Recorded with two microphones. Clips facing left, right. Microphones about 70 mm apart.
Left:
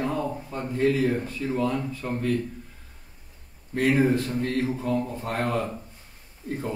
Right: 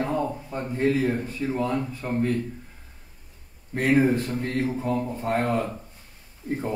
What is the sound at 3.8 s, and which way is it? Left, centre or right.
Speech, right.